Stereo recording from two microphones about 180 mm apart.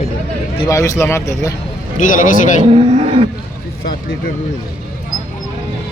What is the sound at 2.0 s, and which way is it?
Speech, 50° left (ahead or behind).